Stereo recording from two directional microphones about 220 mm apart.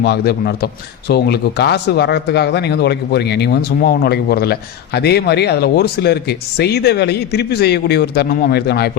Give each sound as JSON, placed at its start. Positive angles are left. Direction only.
{"t": 0.0, "sound": "a man's voice", "side_deg": 45}